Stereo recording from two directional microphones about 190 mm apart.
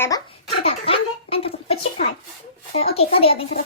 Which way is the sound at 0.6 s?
30° left (ahead or behind).